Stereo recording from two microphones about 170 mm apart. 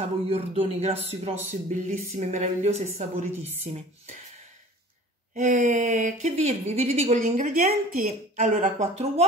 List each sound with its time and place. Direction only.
0.0 s a man's voice: 35° right (ahead or behind)
5.3 s speech: 50° right (ahead or behind)